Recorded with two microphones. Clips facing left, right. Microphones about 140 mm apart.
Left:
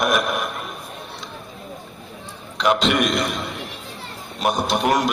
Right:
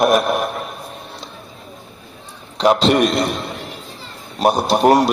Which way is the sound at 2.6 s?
35° right (ahead or behind).